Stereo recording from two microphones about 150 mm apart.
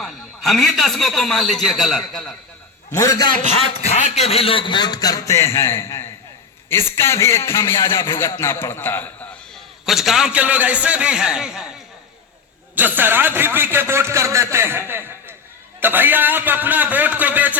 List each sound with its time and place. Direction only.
0.0 s a man's voice: centre (ahead or behind)
2.9 s a man's voice: 20° left (ahead or behind)
3.8 s a man's voice: 45° left (ahead or behind); by 9.0 s 15° left (ahead or behind)
9.8 s a man's voice: centre (ahead or behind)
12.7 s speech: 10° right (ahead or behind)